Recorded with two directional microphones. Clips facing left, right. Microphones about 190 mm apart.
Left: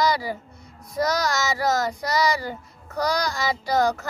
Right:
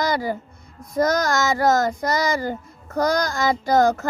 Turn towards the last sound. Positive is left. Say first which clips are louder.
# right 4 dB
turn(degrees=-50)  # may be behind; listen again after turning